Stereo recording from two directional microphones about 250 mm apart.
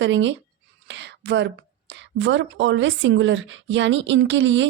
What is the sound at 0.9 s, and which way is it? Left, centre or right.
Whispering, right.